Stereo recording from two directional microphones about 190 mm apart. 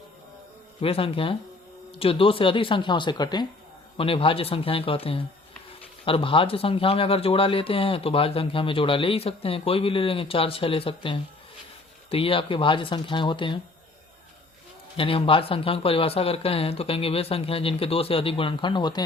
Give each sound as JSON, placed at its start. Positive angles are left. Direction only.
{"t": 0.8, "sound": "speech", "side_deg": 30}
{"t": 14.9, "sound": "speech", "side_deg": 30}